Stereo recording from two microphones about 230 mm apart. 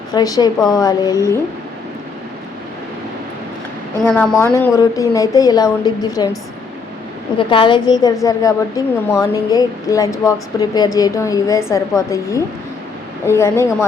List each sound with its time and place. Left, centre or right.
0.1 s a woman's voice: centre
4.0 s a woman's voice: centre
7.3 s a woman's voice: left